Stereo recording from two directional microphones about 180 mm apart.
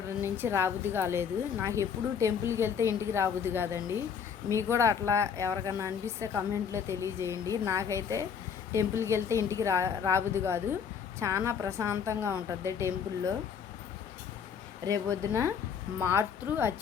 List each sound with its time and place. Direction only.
0.2 s speech: 15° right (ahead or behind)
14.8 s speech: 20° right (ahead or behind)